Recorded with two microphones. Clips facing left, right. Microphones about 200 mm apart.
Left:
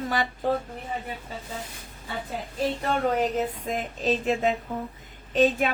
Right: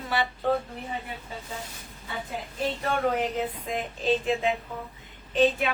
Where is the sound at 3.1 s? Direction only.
40° left (ahead or behind).